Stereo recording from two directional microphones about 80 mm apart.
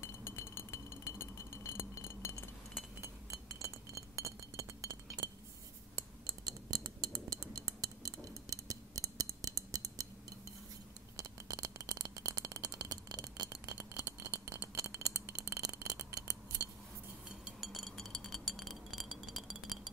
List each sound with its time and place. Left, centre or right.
0.0 s chink: left
3.0 s chink: right
6.2 s cutlery: right
11.1 s rattle: right
14.8 s a sound: right
17.5 s glass: centre